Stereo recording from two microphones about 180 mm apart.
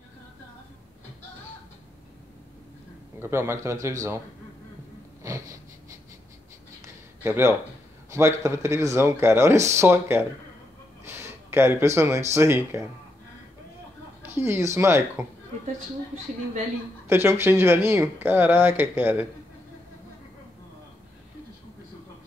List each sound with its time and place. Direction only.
3.2 s speech: 15° right (ahead or behind)
5.2 s a sound: 15° right (ahead or behind)
6.8 s a sound: 15° right (ahead or behind)
8.1 s speech: 15° right (ahead or behind)
14.2 s speech: 15° right (ahead or behind)
17.1 s speech: 15° right (ahead or behind)